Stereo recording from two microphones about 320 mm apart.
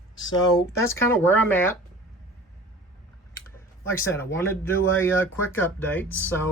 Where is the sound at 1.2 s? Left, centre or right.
Centre.